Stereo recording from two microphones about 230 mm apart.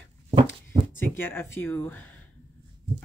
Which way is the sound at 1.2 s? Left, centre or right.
Centre.